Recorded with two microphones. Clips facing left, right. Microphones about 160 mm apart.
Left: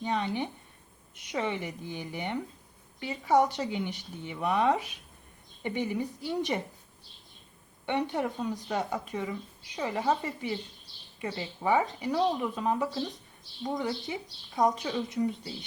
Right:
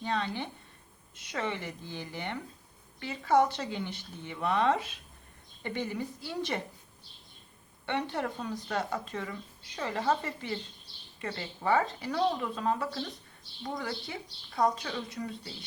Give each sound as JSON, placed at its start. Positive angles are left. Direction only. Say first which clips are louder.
{"t": 0.0, "sound": "a woman's voice", "louder": "left 3 dB", "side_deg": 15}
{"t": 7.9, "sound": "a woman's voice", "louder": "left 3 dB", "side_deg": 15}